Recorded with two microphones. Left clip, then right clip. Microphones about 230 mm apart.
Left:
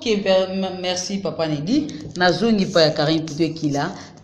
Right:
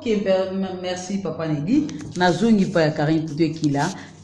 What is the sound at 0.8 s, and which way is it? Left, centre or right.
Speech, centre.